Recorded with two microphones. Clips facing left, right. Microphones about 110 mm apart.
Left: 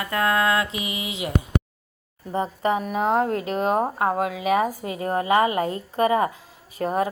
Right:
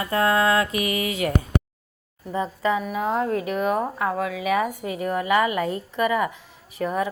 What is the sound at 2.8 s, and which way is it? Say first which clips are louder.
Speech: left 2 dB; 50° left (ahead or behind).